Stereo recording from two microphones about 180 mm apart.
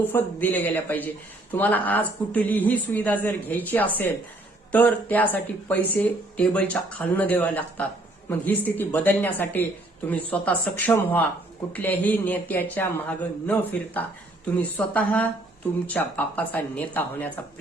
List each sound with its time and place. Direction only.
0.1 s speech: 10° left (ahead or behind)